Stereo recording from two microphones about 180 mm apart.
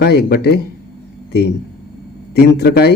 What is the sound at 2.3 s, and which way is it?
Speech, 65° left (ahead or behind).